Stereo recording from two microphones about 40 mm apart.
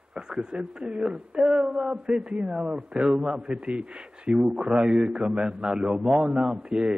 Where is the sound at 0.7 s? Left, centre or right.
Right.